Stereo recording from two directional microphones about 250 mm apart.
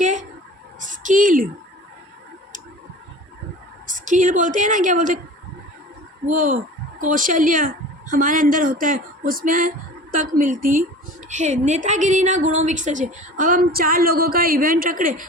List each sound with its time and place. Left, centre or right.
0.0 s a sound: right
3.8 s a woman's voice: right
6.2 s a woman's voice: right